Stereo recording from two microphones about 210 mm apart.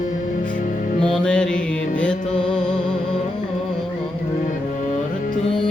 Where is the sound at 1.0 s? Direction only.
5° left (ahead or behind).